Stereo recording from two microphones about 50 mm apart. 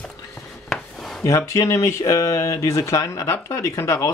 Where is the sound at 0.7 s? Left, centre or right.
Centre.